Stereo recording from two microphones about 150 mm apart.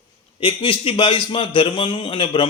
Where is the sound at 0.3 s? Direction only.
35° left (ahead or behind).